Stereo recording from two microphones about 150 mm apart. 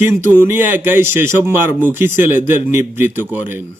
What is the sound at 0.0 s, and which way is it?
A man's voice, 15° right (ahead or behind).